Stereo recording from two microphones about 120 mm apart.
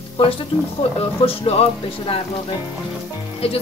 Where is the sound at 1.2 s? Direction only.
55° left (ahead or behind).